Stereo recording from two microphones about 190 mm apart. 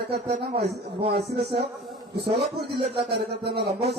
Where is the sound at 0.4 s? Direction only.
55° right (ahead or behind).